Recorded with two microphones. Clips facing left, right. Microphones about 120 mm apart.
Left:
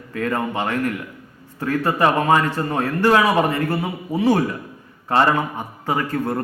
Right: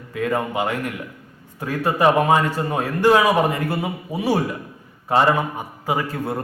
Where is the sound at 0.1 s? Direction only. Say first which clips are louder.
Even; 15° right (ahead or behind).